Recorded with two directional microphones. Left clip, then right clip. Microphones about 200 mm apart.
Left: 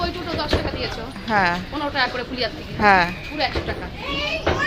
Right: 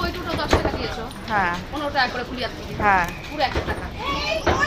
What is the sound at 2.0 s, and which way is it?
Speech, 15° left (ahead or behind).